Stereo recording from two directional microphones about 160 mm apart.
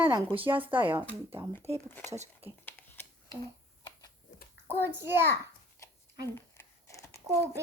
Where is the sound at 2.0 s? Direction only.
45° right (ahead or behind).